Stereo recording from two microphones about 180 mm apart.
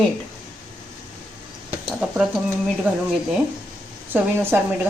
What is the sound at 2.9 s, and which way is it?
Speech, 10° right (ahead or behind).